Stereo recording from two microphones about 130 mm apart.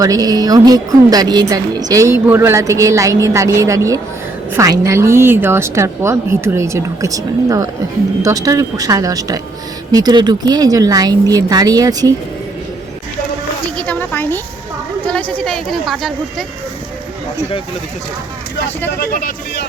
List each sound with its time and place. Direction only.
0.0 s a woman's voice: 30° right (ahead or behind)
13.7 s a sound: 10° left (ahead or behind)
15.0 s a woman's voice: 10° left (ahead or behind)